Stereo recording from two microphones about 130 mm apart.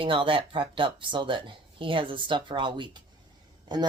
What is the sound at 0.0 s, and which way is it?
Speech, 40° right (ahead or behind).